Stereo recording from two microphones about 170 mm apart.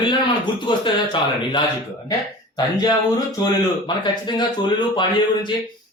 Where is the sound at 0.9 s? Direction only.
30° left (ahead or behind).